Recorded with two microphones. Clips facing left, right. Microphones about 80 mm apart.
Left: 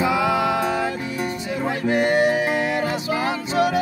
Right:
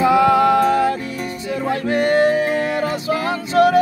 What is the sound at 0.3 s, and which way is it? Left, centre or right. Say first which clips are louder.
Music: right 7 dB; right.